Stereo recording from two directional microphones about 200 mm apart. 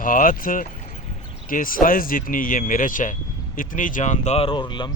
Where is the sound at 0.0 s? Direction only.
45° left (ahead or behind).